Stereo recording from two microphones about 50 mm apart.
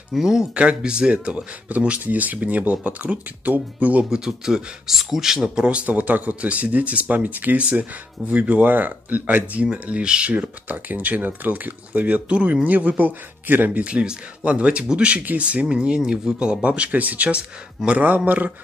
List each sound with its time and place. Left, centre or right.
0.1 s a man's voice: centre
0.6 s speech: right
4.0 s a man's voice: centre
5.6 s speech: right
10.3 s speech: right
13.8 s speech: right